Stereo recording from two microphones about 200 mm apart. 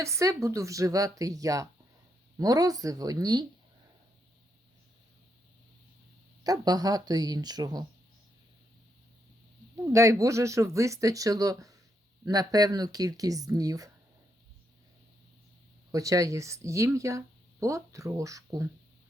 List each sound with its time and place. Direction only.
0.0 s speech: 15° right (ahead or behind)
6.4 s speech: 20° right (ahead or behind)
9.7 s speech: 15° right (ahead or behind)
15.9 s speech: 15° right (ahead or behind)